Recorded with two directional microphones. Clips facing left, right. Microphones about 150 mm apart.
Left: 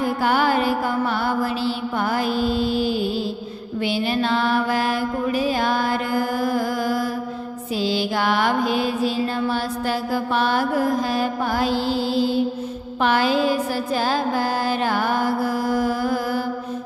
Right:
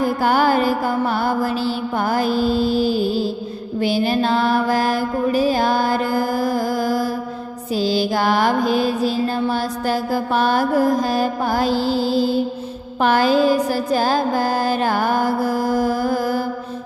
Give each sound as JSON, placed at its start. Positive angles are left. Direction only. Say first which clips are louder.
{"t": 0.0, "sound": "music", "louder": "right 3 dB", "side_deg": -40}
{"t": 3.8, "sound": "mantra", "louder": "right 4 dB", "side_deg": -40}